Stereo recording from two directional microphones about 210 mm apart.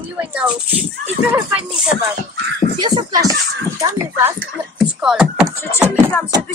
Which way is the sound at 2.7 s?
20° right (ahead or behind).